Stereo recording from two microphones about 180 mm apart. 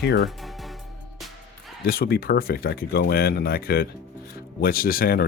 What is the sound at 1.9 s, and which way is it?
Speech, 60° left (ahead or behind).